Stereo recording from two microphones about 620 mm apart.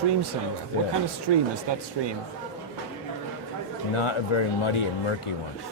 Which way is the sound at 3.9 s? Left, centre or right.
Left.